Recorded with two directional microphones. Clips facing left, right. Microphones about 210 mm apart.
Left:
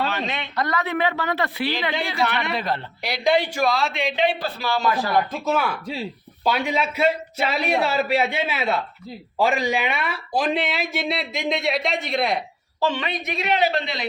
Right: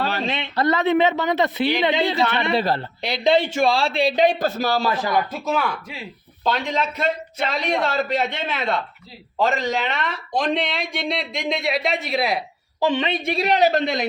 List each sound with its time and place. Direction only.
0.1 s speech: 30° right (ahead or behind)
5.5 s a man's voice: 5° left (ahead or behind)
12.8 s a woman's voice: 20° right (ahead or behind); by 14.1 s 45° right (ahead or behind)